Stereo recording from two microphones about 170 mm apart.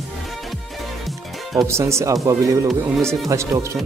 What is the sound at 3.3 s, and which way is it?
Speech, 15° right (ahead or behind).